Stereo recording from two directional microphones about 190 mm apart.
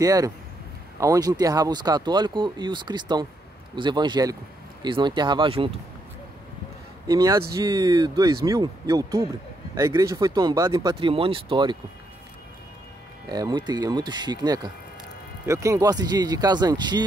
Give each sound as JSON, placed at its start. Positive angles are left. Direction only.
{"t": 0.0, "sound": "speech", "side_deg": -20}
{"t": 7.1, "sound": "speech", "side_deg": -15}
{"t": 13.3, "sound": "speech", "side_deg": -20}